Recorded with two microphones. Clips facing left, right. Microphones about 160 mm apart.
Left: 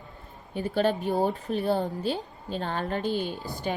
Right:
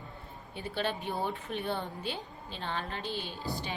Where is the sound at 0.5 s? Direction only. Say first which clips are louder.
Left 9 dB; 45° left (ahead or behind).